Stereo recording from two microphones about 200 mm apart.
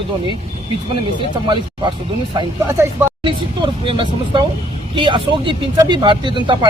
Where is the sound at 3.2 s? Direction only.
25° right (ahead or behind).